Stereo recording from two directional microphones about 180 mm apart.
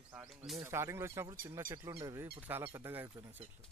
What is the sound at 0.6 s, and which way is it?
Speech, 15° right (ahead or behind).